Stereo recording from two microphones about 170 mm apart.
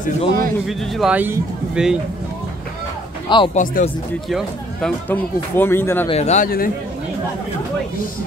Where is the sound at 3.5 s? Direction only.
50° left (ahead or behind).